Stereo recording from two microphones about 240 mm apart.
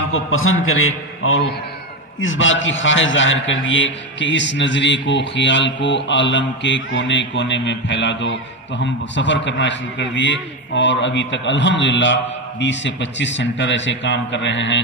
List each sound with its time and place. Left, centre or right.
0.1 s a man's voice: left